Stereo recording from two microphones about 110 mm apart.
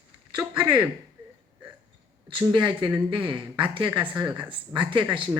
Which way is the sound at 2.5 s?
45° right (ahead or behind).